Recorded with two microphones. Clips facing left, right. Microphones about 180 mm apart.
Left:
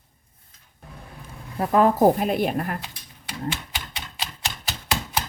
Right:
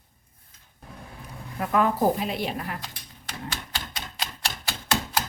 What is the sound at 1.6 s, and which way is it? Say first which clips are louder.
Speech: left 5 dB; 35° left (ahead or behind).